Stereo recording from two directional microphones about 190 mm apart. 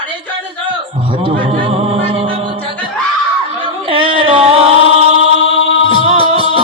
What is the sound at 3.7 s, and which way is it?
A capella, 30° right (ahead or behind).